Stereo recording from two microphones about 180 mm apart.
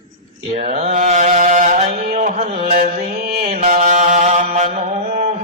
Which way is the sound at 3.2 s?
55° right (ahead or behind).